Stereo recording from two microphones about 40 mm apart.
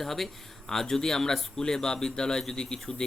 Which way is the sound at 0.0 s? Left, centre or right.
Centre.